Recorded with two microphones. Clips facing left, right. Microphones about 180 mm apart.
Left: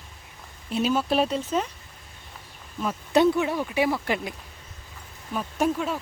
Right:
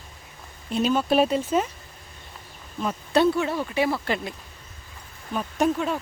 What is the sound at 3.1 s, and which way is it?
Speech, 15° left (ahead or behind).